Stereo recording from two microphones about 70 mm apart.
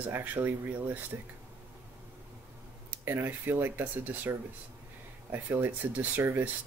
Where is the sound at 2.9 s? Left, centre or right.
Right.